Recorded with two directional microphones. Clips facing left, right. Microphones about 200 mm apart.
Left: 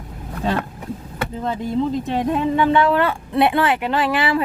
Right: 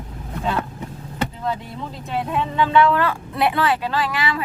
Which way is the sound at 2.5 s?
20° left (ahead or behind).